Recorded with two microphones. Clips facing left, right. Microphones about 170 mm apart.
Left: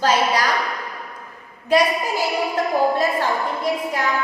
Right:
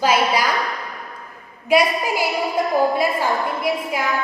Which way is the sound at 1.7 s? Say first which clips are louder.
Right 1 dB; 10° right (ahead or behind).